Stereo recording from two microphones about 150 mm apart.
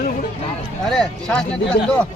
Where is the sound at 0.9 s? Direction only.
5° left (ahead or behind).